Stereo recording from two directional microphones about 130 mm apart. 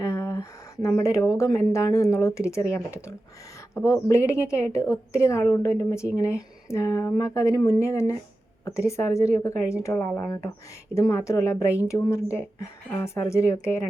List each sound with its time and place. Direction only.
0.0 s a woman's voice: 25° left (ahead or behind)
4.1 s a woman's voice: 20° left (ahead or behind)